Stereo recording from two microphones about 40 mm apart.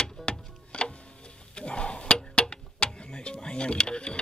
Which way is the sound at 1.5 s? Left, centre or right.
Left.